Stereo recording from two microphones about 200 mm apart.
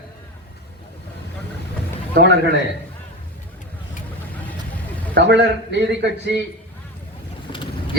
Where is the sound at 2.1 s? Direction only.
60° right (ahead or behind).